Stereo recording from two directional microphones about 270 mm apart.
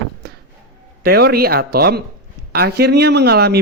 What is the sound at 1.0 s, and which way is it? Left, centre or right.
Speech, right.